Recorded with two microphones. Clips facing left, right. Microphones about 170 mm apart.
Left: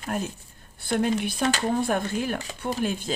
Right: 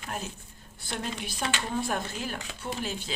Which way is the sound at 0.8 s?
55° left (ahead or behind).